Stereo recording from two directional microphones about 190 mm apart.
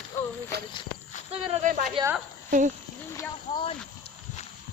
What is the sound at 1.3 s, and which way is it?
Speech, 40° right (ahead or behind).